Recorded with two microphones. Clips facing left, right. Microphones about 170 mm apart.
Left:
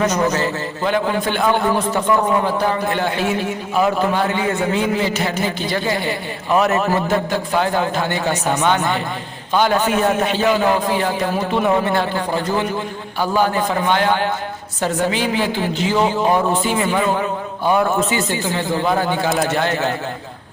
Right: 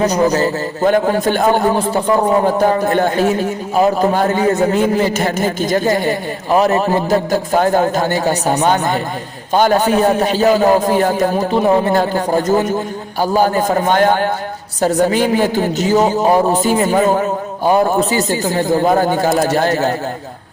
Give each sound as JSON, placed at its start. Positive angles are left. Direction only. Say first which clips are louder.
{"t": 0.0, "sound": "a man's voice", "louder": "right 4 dB", "side_deg": -35}